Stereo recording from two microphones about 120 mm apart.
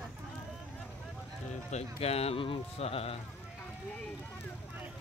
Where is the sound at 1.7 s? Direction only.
65° left (ahead or behind).